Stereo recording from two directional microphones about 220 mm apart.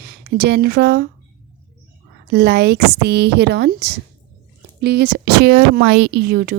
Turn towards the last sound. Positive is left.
turn(degrees=-45)  # may be behind; listen again after turning